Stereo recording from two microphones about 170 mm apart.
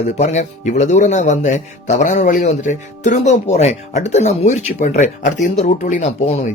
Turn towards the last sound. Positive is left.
turn(degrees=40)  # may be behind; listen again after turning